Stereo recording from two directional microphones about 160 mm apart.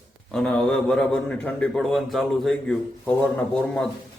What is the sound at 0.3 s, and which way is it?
A man's voice, 5° left (ahead or behind).